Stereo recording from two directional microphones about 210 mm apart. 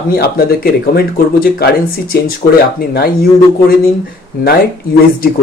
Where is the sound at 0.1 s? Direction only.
45° left (ahead or behind).